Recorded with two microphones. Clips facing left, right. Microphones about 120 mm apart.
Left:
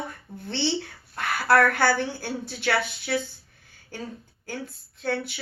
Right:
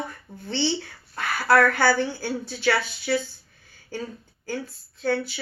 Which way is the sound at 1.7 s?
60° left (ahead or behind).